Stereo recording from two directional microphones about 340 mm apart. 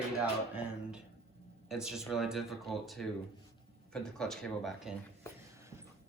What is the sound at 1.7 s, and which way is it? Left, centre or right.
Speech, centre.